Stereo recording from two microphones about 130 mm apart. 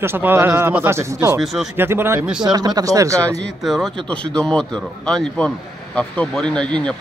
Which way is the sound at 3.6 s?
Centre (ahead or behind).